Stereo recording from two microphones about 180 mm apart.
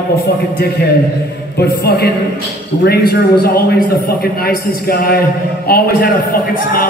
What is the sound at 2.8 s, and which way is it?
Speech, 60° left (ahead or behind).